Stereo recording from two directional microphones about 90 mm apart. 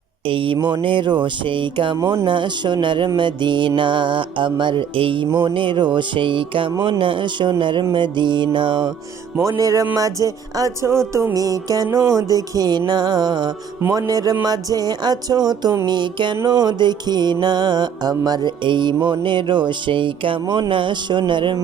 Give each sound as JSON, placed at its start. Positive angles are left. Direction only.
{"t": 0.3, "sound": "music", "side_deg": -70}
{"t": 9.4, "sound": "music", "side_deg": -35}
{"t": 11.3, "sound": "music", "side_deg": -40}
{"t": 13.8, "sound": "music", "side_deg": -40}
{"t": 15.9, "sound": "music", "side_deg": -60}